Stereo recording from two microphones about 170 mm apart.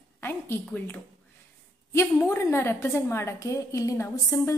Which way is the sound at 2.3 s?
15° left (ahead or behind).